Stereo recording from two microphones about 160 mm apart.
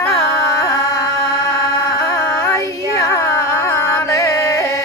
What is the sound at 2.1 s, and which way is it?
Music, 20° left (ahead or behind).